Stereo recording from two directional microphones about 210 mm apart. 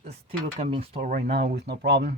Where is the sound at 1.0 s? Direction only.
40° right (ahead or behind).